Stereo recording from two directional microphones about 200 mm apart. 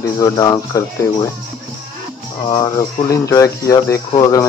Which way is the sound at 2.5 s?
15° left (ahead or behind).